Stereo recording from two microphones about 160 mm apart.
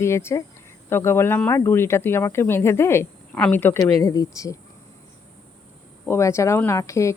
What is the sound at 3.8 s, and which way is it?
Speech, 25° left (ahead or behind).